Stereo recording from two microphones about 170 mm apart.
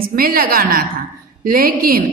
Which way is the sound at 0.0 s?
55° right (ahead or behind).